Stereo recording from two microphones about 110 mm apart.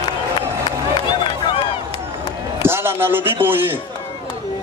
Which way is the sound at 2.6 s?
20° right (ahead or behind).